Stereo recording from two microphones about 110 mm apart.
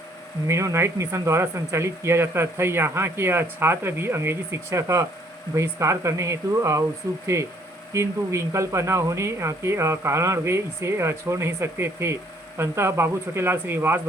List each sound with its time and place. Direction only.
0.4 s speech: 25° right (ahead or behind)